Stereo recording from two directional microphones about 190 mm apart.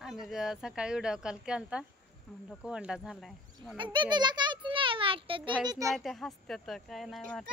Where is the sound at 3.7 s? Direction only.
25° right (ahead or behind).